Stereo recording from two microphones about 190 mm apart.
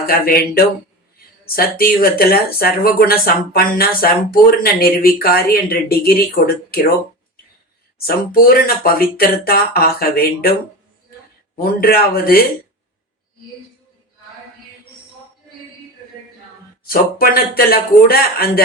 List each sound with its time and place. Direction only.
0.1 s speech: 50° left (ahead or behind)
7.9 s speech: 50° left (ahead or behind)
11.6 s speech: 50° left (ahead or behind)
16.8 s speech: 50° left (ahead or behind)